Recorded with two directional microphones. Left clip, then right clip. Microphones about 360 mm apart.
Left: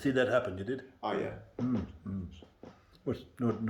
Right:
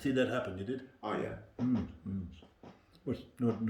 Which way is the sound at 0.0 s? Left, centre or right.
Centre.